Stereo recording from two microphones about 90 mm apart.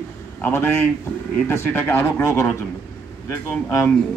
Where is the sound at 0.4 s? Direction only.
25° left (ahead or behind).